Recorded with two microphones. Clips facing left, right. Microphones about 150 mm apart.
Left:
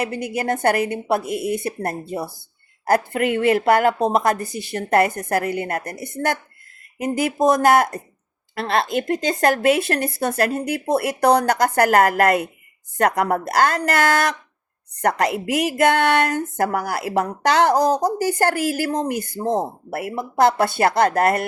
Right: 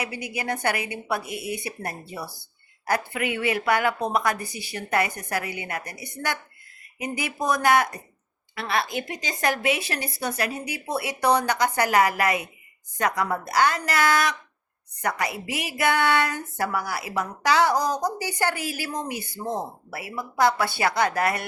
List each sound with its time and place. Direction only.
0.0 s a woman's voice: 50° left (ahead or behind)
15.0 s a woman's voice: 70° left (ahead or behind)
15.5 s speech: 50° left (ahead or behind)
17.9 s a woman's voice: 40° left (ahead or behind)